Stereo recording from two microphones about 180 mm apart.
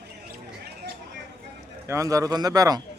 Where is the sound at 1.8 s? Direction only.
15° right (ahead or behind).